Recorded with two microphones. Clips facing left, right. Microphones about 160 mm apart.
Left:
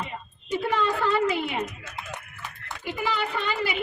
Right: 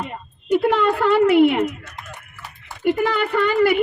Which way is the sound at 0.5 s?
65° right (ahead or behind).